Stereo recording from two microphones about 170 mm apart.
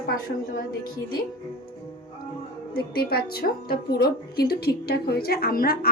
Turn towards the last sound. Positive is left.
turn(degrees=60)  # may be behind; listen again after turning